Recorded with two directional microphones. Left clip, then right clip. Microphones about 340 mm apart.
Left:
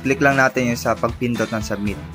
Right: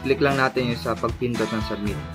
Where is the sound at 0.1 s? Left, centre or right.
Centre.